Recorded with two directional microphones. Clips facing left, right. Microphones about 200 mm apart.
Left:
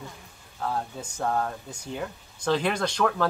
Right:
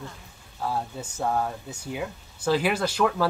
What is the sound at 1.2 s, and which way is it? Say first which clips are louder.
Speech: right 1 dB; 5° right (ahead or behind).